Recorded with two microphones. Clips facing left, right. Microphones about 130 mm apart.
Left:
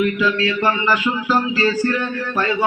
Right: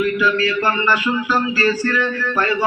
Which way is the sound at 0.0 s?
25° left (ahead or behind).